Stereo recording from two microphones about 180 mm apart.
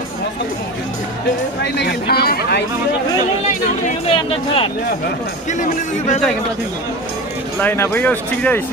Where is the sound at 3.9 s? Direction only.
35° left (ahead or behind).